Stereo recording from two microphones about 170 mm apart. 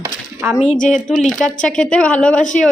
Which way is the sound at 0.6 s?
45° left (ahead or behind).